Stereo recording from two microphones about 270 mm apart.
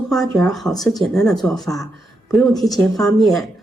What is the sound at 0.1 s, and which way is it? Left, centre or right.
A woman's voice, centre.